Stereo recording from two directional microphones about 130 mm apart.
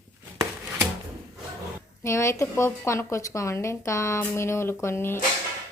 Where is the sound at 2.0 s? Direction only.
20° left (ahead or behind).